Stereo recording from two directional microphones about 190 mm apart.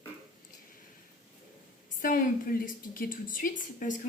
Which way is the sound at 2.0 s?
45° left (ahead or behind).